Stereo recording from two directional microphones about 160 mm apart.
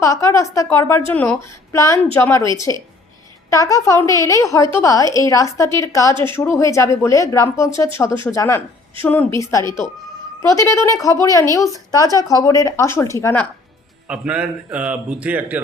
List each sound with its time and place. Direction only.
0.0 s a woman's voice: 20° left (ahead or behind)
3.5 s a woman's voice: 20° left (ahead or behind)
14.1 s a man's voice: 5° right (ahead or behind)